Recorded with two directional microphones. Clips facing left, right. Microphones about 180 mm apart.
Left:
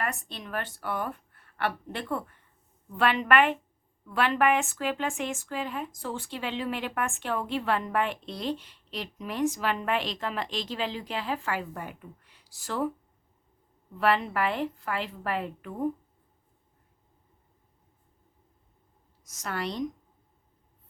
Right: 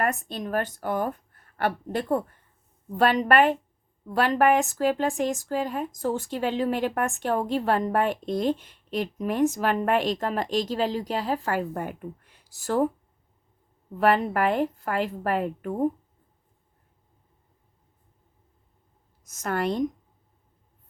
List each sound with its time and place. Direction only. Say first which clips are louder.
0.0 s a woman's voice: right 7 dB; 45° right (ahead or behind)
14.0 s speech: right 4 dB; 45° right (ahead or behind)
19.3 s speech: right 7 dB; 50° right (ahead or behind)